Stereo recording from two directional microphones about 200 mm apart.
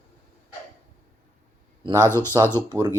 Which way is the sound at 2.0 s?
10° left (ahead or behind).